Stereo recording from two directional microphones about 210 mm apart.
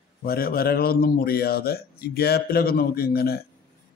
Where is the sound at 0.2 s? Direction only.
45° left (ahead or behind).